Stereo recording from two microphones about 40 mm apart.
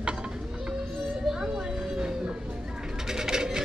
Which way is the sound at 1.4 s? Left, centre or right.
Centre.